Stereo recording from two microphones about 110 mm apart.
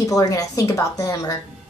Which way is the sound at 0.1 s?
30° left (ahead or behind).